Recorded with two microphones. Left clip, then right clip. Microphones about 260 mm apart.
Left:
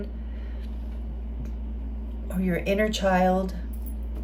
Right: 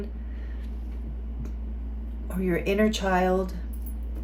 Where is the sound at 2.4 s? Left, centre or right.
Right.